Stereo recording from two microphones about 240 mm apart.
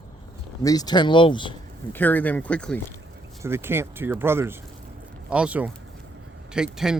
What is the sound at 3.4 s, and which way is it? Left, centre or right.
Speech, centre.